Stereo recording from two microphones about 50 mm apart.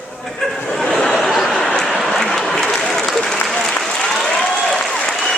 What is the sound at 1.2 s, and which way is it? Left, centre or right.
Applause, centre.